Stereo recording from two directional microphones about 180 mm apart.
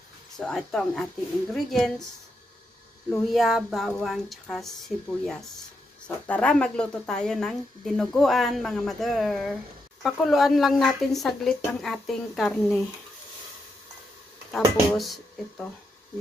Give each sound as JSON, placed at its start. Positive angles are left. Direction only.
{"t": 0.4, "sound": "a woman's voice", "side_deg": 5}
{"t": 3.1, "sound": "a woman's voice", "side_deg": 0}
{"t": 14.9, "sound": "a woman's voice", "side_deg": 0}